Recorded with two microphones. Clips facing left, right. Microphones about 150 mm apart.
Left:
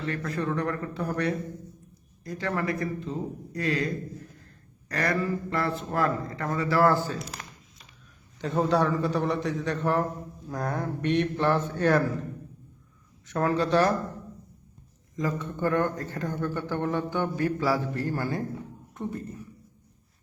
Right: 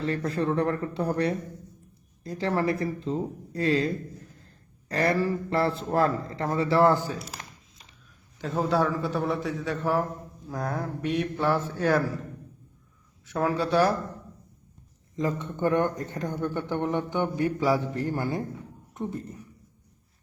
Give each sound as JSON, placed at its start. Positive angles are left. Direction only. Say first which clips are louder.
{"t": 0.0, "sound": "speech", "louder": "right 3 dB", "side_deg": -30}
{"t": 8.4, "sound": "a man's voice", "louder": "left 1 dB", "side_deg": 0}
{"t": 13.2, "sound": "speech", "louder": "left 1 dB", "side_deg": -5}
{"t": 15.1, "sound": "speech", "louder": "right 1 dB", "side_deg": -25}